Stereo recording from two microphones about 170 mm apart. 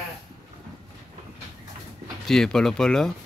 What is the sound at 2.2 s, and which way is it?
Speech, 5° left (ahead or behind).